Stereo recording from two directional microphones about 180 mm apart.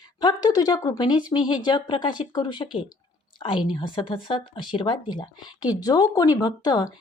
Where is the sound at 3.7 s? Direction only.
25° left (ahead or behind).